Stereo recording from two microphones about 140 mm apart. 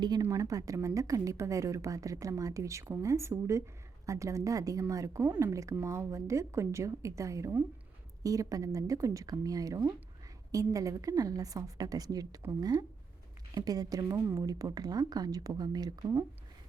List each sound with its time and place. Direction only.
0.2 s a woman's voice: 25° right (ahead or behind)